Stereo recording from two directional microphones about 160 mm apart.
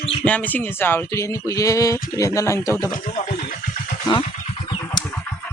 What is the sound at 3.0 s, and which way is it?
Speech, 45° left (ahead or behind).